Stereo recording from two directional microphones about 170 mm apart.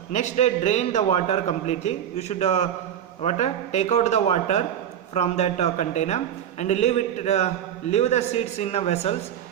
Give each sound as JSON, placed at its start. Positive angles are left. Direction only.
{"t": 0.1, "sound": "a man's voice", "side_deg": 45}